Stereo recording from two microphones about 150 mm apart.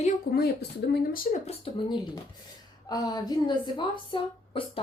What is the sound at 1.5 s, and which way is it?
Speech, 40° left (ahead or behind).